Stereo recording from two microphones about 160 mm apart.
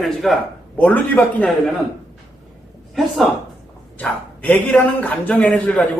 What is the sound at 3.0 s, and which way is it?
A man's voice, centre (ahead or behind).